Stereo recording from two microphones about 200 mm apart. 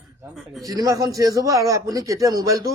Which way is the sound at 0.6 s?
15° right (ahead or behind).